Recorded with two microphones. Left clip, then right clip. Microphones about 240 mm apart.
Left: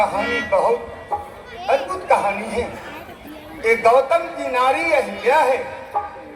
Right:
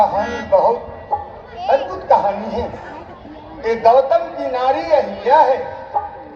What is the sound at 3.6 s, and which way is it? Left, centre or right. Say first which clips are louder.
A man's voice: right 2 dB; left.